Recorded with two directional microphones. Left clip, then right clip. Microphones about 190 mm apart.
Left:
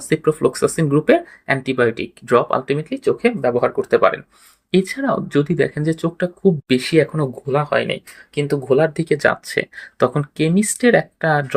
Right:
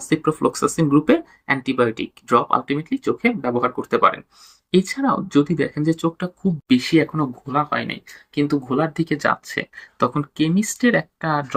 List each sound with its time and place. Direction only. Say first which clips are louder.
0.1 s speech: left 3 dB; 40° left (ahead or behind)